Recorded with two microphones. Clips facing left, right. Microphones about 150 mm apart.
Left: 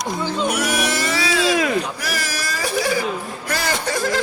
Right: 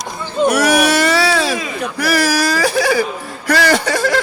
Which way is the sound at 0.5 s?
85° right.